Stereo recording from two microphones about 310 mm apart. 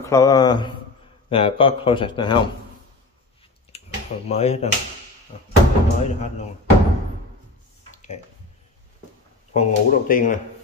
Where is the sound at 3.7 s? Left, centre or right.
Left.